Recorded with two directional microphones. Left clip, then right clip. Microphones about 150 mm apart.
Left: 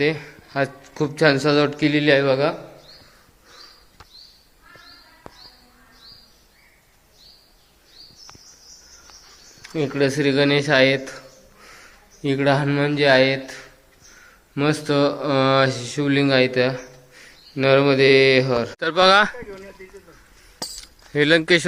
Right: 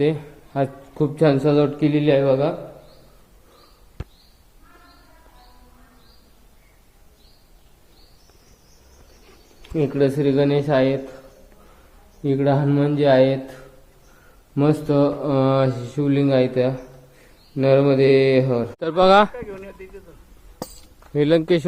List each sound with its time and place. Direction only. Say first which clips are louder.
0.0 s a man's voice: even; 10° right (ahead or behind)
9.7 s speech: right 1 dB; 5° right (ahead or behind)
12.2 s speech: left 1 dB; 5° left (ahead or behind)
14.5 s speech: right 1 dB; 15° right (ahead or behind)
19.4 s speech: right 3 dB; 40° left (ahead or behind)
21.1 s speech: left 1 dB; centre (ahead or behind)